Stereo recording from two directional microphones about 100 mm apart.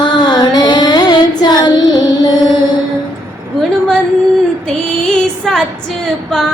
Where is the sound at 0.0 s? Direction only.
45° left (ahead or behind).